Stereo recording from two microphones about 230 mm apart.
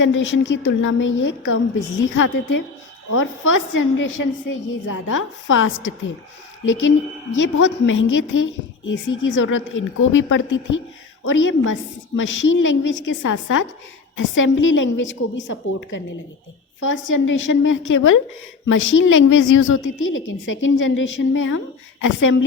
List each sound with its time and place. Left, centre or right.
0.0 s a woman's voice: left
7.3 s a woman's voice: left